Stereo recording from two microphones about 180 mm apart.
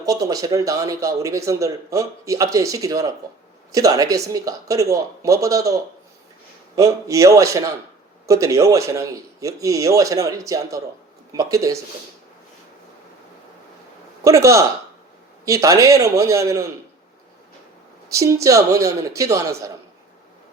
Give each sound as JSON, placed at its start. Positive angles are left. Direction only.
{"t": 0.0, "sound": "a man's voice", "side_deg": -20}
{"t": 14.3, "sound": "a man's voice", "side_deg": -15}
{"t": 18.1, "sound": "a man's voice", "side_deg": -15}